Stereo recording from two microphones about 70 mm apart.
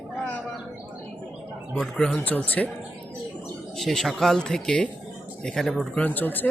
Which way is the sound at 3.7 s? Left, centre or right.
Centre.